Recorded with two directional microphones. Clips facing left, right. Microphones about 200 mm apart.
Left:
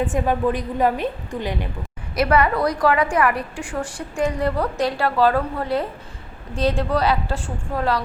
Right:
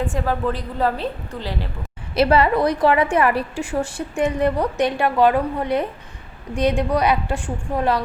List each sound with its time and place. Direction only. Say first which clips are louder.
0.0 s a woman's voice: left 2 dB; 20° left (ahead or behind)
2.1 s a woman's voice: right 2 dB; 25° right (ahead or behind)